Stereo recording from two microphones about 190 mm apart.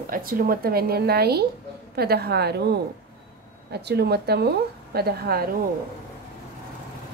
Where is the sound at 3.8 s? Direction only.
60° right (ahead or behind).